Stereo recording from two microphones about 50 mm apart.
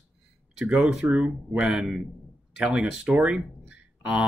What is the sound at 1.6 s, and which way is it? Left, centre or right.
Speech, centre.